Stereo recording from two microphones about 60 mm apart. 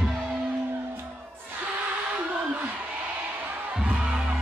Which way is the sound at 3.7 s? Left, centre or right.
Centre.